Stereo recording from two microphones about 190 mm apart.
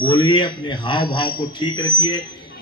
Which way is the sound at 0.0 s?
25° left (ahead or behind).